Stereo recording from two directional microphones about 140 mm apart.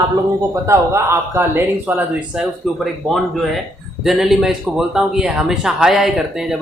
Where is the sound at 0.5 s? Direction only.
20° right (ahead or behind).